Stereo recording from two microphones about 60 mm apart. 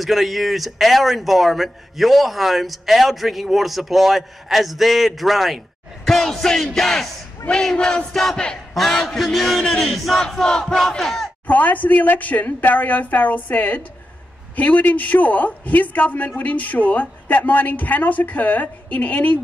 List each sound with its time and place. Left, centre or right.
0.0 s a man's voice: centre
6.0 s music: centre
8.7 s a man's voice: centre
10.3 s music: centre
11.4 s speech: left